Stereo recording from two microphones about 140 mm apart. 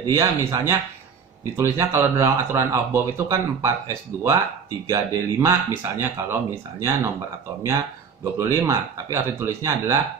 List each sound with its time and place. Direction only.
0.0 s speech: 25° right (ahead or behind)